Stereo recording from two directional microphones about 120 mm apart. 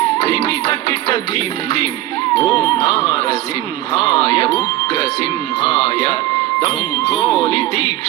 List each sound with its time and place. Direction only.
0.2 s music: 30° left (ahead or behind)
2.3 s speech: 35° left (ahead or behind)